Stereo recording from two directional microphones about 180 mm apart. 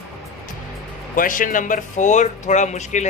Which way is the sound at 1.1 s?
50° left (ahead or behind).